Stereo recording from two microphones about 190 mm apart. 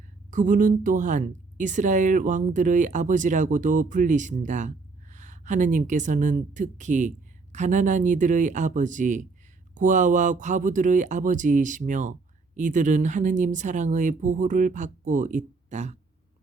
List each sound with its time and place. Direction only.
0.3 s speech: 45° right (ahead or behind)